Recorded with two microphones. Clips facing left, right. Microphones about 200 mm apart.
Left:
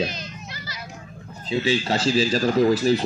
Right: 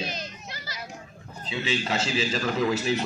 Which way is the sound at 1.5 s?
35° left (ahead or behind).